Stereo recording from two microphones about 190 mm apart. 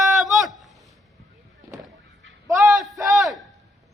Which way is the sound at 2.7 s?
Centre (ahead or behind).